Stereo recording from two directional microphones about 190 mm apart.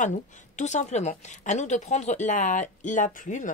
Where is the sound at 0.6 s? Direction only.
40° left (ahead or behind).